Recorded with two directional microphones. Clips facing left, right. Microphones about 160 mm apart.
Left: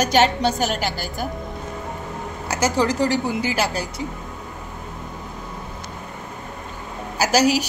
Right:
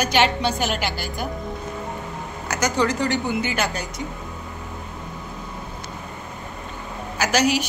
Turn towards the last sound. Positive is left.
turn(degrees=35)  # may be behind; listen again after turning